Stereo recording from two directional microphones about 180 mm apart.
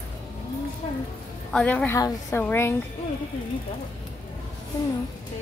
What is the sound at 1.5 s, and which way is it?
A woman's voice, 10° left (ahead or behind).